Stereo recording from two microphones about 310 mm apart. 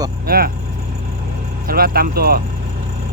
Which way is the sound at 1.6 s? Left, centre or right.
Right.